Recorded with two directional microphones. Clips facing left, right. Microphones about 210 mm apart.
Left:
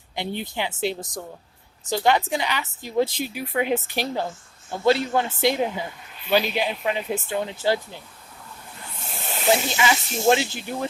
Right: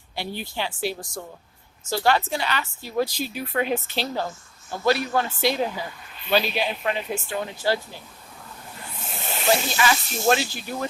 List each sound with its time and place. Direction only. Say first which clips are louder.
0.2 s a woman's voice: left 2 dB; 20° left (ahead or behind)
9.5 s speech: left 1 dB; 20° left (ahead or behind)